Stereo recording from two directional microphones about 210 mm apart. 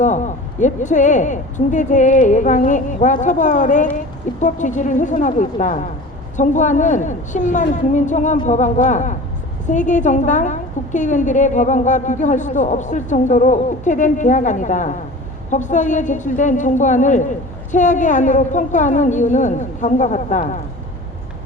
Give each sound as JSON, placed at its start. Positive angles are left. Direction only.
{"t": 0.6, "sound": "a woman's voice", "side_deg": 35}